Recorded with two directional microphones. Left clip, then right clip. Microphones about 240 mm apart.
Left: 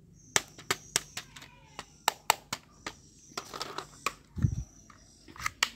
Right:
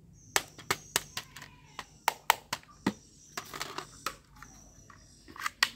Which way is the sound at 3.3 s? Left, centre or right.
Right.